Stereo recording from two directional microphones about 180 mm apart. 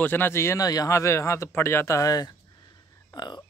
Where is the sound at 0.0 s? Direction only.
10° left (ahead or behind).